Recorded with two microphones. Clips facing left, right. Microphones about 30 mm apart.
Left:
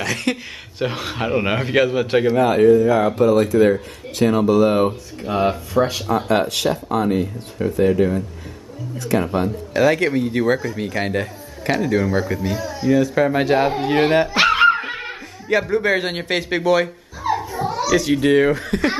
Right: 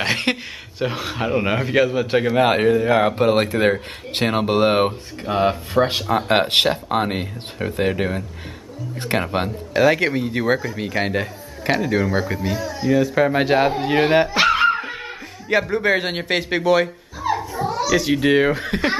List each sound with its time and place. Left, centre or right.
0.0 s speech: right
0.7 s a man's voice: centre
2.3 s speech: right
5.2 s speech: centre
6.2 s speech: right
9.8 s a man's voice: centre
14.3 s music: centre
15.6 s speech: centre
17.3 s children playing: centre
17.9 s speech: centre